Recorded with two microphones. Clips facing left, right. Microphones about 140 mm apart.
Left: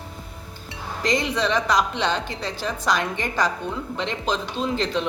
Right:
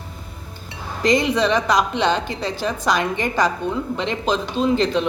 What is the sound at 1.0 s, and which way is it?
A woman's voice, 10° right (ahead or behind).